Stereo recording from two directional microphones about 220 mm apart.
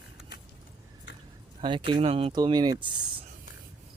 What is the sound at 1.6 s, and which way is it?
Speech, 20° right (ahead or behind).